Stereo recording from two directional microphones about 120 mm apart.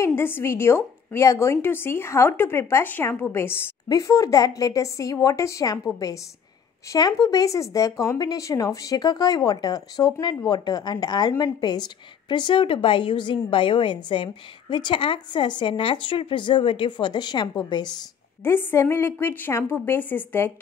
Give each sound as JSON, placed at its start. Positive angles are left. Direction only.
{"t": 0.0, "sound": "a woman's voice", "side_deg": 20}
{"t": 18.4, "sound": "a woman's voice", "side_deg": 20}